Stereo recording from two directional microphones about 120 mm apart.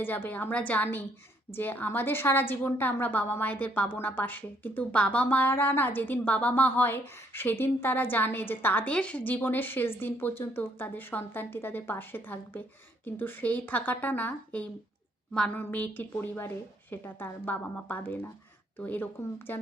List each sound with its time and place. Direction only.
0.0 s a woman's voice: 15° left (ahead or behind)